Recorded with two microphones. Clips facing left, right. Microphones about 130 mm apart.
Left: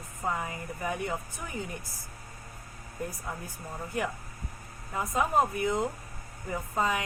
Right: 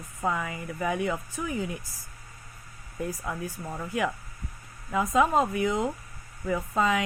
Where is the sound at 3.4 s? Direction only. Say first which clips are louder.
Right 4 dB; 90° right.